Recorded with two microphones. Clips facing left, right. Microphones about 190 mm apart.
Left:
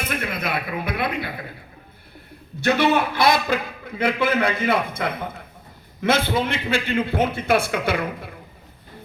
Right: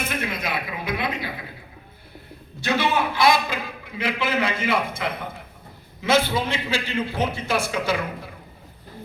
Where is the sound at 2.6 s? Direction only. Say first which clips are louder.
Left 4 dB; 55° left (ahead or behind).